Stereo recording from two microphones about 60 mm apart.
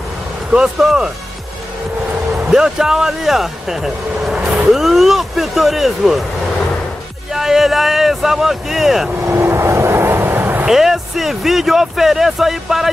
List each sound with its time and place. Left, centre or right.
0.8 s speech: centre
2.5 s speech: centre
7.3 s speech: centre
9.2 s vehicle: right
10.7 s speech: centre